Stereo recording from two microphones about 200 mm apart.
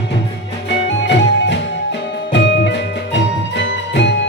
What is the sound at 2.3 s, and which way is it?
Music, 60° left (ahead or behind).